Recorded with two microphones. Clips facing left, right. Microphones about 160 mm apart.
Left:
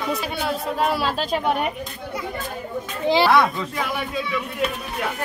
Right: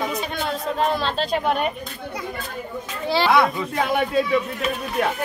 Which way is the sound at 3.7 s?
55° right (ahead or behind).